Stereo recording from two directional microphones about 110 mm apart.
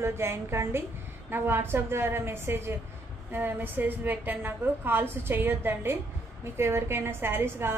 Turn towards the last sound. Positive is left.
turn(degrees=-20)  # may be behind; listen again after turning